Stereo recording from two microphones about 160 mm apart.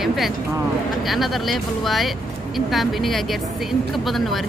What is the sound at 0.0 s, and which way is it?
Speech, centre (ahead or behind).